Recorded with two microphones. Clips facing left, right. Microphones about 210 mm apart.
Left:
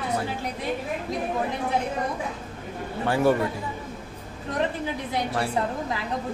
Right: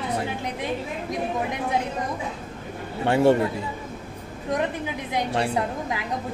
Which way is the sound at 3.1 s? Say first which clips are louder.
Right 3 dB; 25° right (ahead or behind).